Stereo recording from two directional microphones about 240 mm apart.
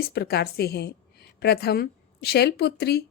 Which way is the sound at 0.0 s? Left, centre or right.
Left.